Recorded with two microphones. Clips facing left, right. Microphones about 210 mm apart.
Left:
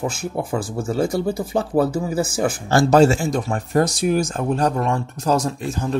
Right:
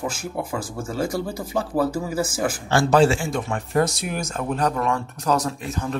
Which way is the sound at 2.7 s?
40° left (ahead or behind).